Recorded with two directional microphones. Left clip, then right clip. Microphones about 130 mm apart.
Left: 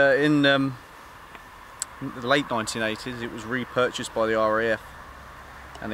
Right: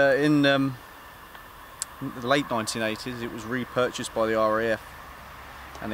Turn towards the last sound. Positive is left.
turn(degrees=-5)  # may be behind; listen again after turning